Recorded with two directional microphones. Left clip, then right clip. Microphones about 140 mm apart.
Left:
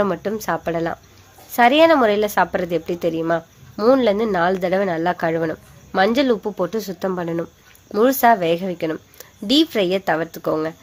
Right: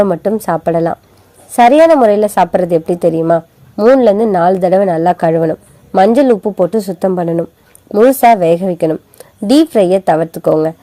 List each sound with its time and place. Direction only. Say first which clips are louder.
0.1 s a woman's voice: right 9 dB; 25° right (ahead or behind)